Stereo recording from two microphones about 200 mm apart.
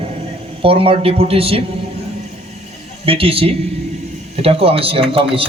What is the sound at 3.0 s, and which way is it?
A man's voice, 25° right (ahead or behind).